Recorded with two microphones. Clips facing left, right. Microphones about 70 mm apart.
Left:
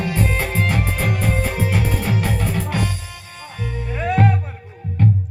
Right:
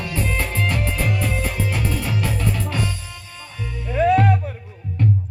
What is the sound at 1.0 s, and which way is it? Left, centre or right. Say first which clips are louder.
Music: left 2 dB; left.